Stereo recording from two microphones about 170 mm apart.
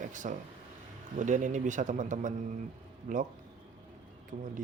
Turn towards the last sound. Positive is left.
turn(degrees=-50)  # may be behind; listen again after turning